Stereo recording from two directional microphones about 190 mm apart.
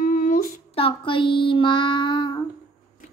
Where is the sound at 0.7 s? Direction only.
25° left (ahead or behind).